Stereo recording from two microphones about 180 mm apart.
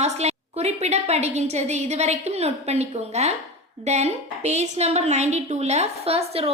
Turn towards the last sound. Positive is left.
turn(degrees=-35)  # may be behind; listen again after turning